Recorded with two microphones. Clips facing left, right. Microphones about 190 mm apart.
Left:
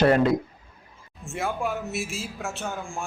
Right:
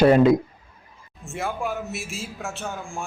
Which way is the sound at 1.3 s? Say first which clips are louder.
Even; centre (ahead or behind).